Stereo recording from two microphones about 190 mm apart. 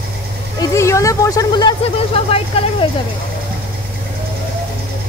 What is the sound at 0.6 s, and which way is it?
Speech, 15° left (ahead or behind).